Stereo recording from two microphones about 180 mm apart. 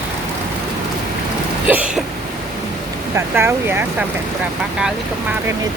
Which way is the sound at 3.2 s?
15° right (ahead or behind).